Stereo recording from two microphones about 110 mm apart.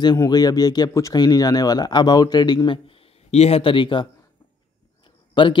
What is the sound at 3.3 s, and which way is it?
Speech, 70° left (ahead or behind).